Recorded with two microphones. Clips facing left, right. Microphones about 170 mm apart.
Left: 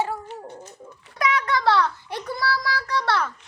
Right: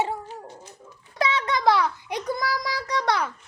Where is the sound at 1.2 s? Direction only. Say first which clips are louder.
Even; 25° right (ahead or behind).